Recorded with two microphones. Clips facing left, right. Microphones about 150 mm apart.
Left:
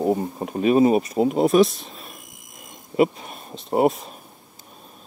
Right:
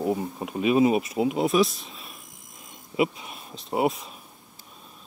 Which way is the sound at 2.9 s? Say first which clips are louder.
Left 6 dB; 45° left (ahead or behind).